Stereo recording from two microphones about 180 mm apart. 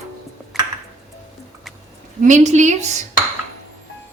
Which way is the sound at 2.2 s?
40° right (ahead or behind).